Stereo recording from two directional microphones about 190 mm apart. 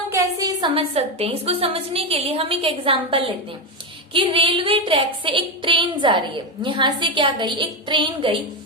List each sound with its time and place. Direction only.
0.1 s a woman's voice: 20° right (ahead or behind)